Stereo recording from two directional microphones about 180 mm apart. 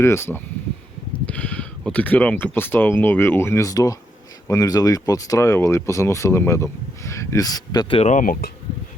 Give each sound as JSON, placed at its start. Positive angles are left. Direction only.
{"t": 0.0, "sound": "speech", "side_deg": 15}